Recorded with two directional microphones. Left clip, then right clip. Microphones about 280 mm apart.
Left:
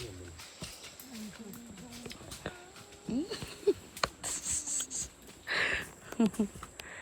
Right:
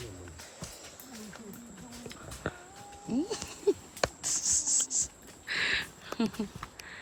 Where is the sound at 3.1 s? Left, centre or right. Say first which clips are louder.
Right 3 dB; centre.